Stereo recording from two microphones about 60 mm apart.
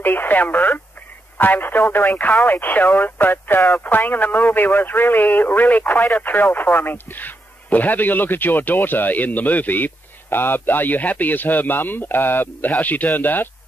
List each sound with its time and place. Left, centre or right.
0.0 s speech: left